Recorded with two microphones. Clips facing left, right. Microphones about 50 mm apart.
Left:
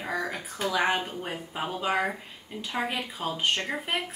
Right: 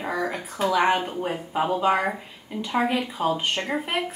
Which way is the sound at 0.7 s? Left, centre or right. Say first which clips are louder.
Right 4 dB; centre.